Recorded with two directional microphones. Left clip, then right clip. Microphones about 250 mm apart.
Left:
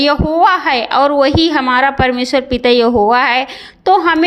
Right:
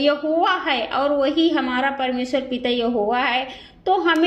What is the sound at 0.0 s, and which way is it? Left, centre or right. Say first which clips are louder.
A woman's voice: left 8 dB; left.